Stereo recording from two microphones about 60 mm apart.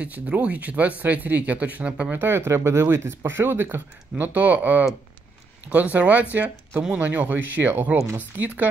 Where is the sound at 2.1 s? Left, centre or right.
Right.